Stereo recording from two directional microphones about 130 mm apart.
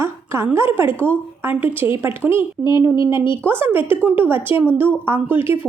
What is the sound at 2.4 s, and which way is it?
Speech, 35° left (ahead or behind).